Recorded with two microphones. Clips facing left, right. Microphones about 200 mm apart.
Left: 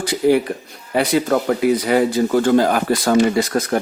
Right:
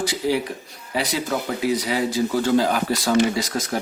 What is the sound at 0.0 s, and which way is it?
Speech, 55° left (ahead or behind).